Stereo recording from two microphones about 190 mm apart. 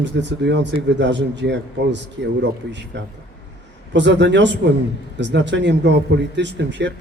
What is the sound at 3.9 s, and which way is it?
Speech, 70° right (ahead or behind).